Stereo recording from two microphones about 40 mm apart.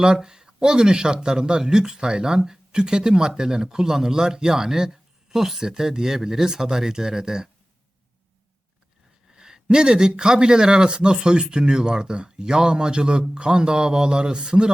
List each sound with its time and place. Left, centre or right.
0.0 s speech: centre
9.3 s speech: centre